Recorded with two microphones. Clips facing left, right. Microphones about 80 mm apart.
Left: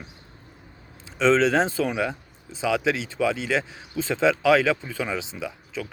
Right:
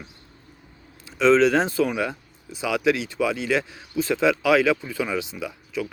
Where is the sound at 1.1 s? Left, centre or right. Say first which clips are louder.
Right 2 dB; left.